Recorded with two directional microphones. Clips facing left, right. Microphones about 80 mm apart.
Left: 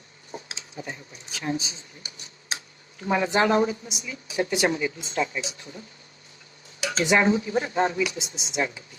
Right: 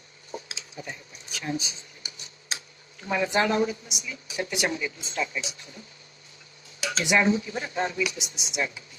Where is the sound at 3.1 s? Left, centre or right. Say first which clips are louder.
Left 3 dB; left.